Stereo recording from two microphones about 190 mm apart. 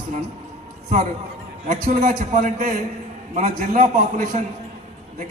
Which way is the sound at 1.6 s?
45° right (ahead or behind).